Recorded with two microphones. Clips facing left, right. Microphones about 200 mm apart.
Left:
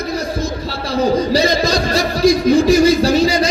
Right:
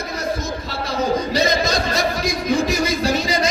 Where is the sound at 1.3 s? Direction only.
35° left (ahead or behind).